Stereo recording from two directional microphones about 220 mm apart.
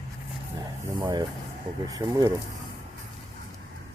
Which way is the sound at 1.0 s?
20° right (ahead or behind).